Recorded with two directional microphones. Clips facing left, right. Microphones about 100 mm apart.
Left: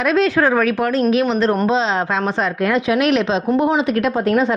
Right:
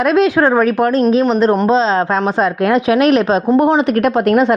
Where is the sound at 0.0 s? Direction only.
45° right (ahead or behind).